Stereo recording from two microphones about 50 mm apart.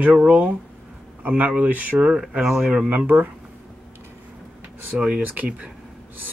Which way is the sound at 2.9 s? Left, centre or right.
Right.